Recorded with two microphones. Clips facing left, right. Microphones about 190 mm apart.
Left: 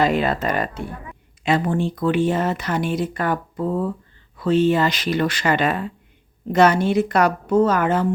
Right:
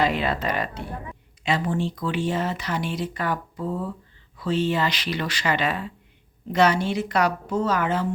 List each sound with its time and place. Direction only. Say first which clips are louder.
0.0 s speech: left 4 dB; 45° left (ahead or behind)